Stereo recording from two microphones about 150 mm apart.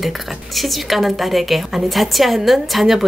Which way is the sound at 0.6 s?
Centre (ahead or behind).